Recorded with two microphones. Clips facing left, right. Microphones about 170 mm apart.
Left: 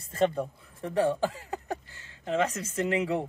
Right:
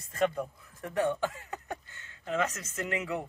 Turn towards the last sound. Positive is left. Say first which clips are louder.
# left 6 dB
turn(degrees=30)  # may be behind; listen again after turning